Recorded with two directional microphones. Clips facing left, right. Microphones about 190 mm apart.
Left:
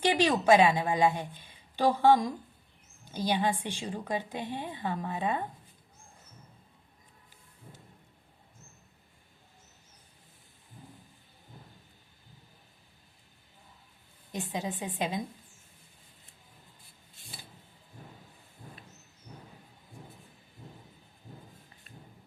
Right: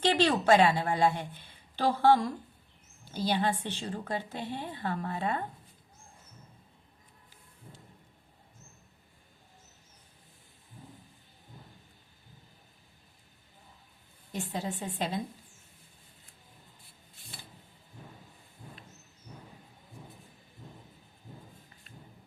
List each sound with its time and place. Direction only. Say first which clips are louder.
0.0 s a woman's voice: even; 10° left (ahead or behind)
14.3 s a woman's voice: even; 15° left (ahead or behind)